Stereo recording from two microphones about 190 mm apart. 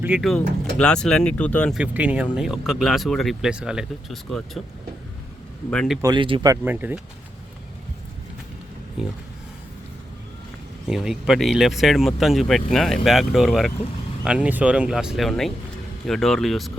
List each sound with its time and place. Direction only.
0.0 s speech: 5° right (ahead or behind)
1.8 s speech: 10° right (ahead or behind)
5.7 s speech: 5° left (ahead or behind)
6.0 s speech: 25° right (ahead or behind)
10.8 s speech: centre (ahead or behind)